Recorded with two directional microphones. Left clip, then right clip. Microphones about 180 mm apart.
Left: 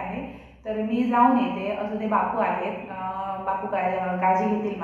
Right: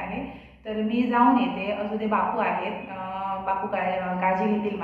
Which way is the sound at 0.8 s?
15° left (ahead or behind).